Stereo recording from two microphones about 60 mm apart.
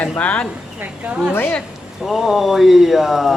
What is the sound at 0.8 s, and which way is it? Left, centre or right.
Speech, right.